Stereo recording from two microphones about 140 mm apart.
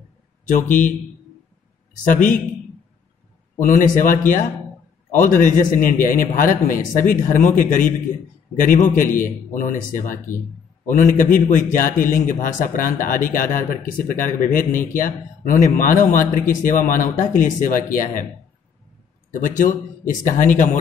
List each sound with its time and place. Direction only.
0.7 s speech: 65° left (ahead or behind)
2.0 s a man's voice: 65° left (ahead or behind)
3.5 s a man's voice: 65° left (ahead or behind)
19.3 s speech: 70° left (ahead or behind)